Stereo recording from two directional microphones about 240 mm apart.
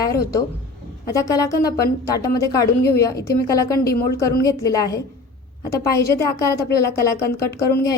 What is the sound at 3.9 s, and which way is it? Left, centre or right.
Speech, left.